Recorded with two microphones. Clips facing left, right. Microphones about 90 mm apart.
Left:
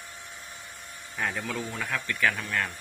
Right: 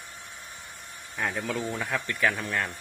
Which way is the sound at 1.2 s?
15° right (ahead or behind).